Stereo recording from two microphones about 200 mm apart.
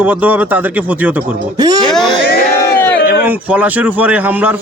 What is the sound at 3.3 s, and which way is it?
Speech, 10° right (ahead or behind).